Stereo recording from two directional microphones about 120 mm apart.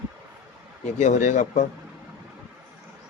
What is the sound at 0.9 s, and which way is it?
Speech, 90° left.